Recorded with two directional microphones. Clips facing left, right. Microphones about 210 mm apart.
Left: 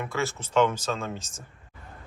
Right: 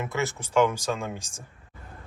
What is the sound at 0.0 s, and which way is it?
Speech, 20° right (ahead or behind).